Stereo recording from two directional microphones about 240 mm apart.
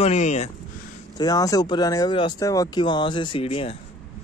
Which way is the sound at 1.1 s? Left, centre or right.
Centre.